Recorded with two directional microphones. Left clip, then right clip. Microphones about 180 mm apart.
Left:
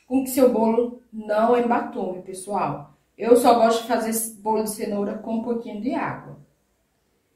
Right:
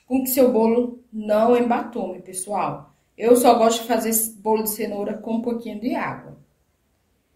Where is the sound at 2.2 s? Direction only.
50° right (ahead or behind).